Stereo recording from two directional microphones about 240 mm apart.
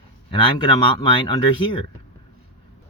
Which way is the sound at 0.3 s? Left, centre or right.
Left.